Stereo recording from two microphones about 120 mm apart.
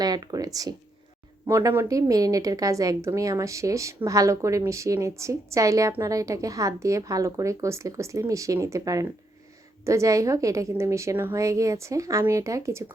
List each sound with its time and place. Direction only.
0.0 s a woman's voice: 35° right (ahead or behind)